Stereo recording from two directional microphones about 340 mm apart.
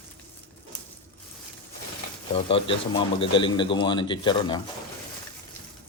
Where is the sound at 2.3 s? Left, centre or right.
Centre.